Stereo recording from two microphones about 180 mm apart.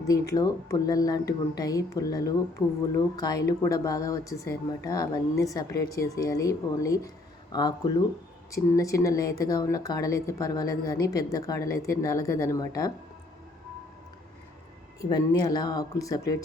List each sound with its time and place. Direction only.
0.1 s speech: 20° left (ahead or behind)
15.1 s speech: 20° left (ahead or behind)